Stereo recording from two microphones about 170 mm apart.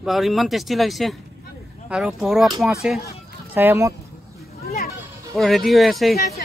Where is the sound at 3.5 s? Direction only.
15° right (ahead or behind).